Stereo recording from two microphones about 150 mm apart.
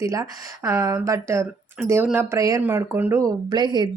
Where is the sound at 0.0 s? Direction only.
20° right (ahead or behind).